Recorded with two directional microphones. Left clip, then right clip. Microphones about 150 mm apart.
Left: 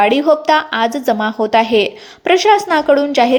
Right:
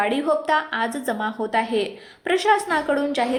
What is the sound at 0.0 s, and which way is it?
A woman's voice, 35° left (ahead or behind).